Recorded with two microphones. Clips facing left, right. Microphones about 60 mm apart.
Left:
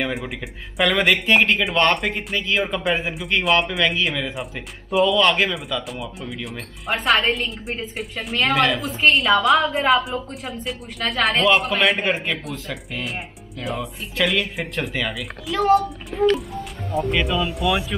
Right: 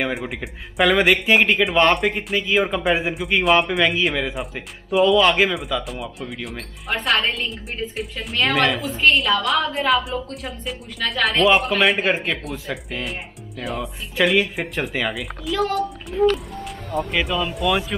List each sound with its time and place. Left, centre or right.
0.0 s speech: centre
16.5 s speech: right
17.1 s speech: centre